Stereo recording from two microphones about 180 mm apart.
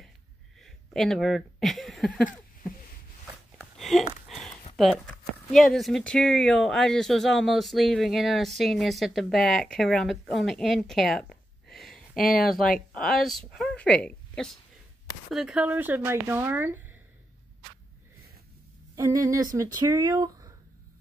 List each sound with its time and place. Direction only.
0.6 s speech: centre (ahead or behind)
3.5 s a sound: centre (ahead or behind)
4.7 s speech: centre (ahead or behind)
11.6 s a sound: centre (ahead or behind)
12.4 s a woman's voice: centre (ahead or behind)
18.9 s speech: 15° right (ahead or behind)